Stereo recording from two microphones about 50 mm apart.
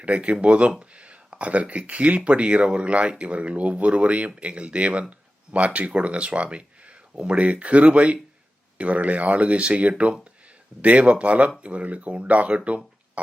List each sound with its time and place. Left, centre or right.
0.0 s speech: right